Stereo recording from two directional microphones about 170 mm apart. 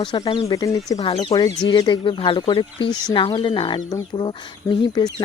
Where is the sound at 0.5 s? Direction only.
20° left (ahead or behind).